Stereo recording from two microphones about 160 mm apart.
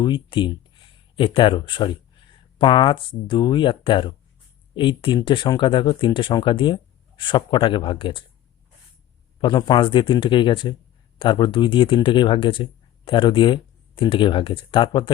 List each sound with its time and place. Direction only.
0.0 s speech: 30° left (ahead or behind)
9.4 s speech: 25° left (ahead or behind)